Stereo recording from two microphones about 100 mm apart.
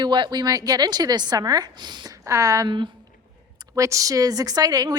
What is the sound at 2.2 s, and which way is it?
Speech, 35° right (ahead or behind).